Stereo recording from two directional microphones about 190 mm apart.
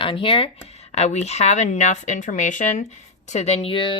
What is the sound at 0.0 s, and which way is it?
Speech, 25° left (ahead or behind).